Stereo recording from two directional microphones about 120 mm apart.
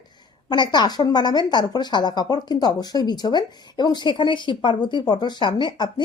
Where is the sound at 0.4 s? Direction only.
35° left (ahead or behind).